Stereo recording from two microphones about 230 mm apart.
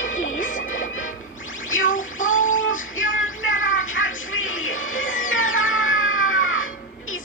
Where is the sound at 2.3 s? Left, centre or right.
Left.